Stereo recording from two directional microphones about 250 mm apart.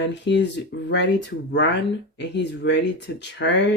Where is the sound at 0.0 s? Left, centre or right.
Left.